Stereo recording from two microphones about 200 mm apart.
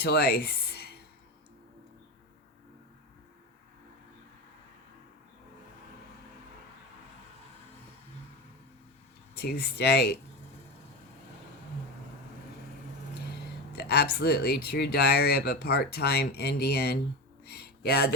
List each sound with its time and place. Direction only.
0.0 s speech: 55° left (ahead or behind)
9.3 s speech: 55° left (ahead or behind)
13.7 s speech: 55° left (ahead or behind)
17.4 s a sound: 50° left (ahead or behind)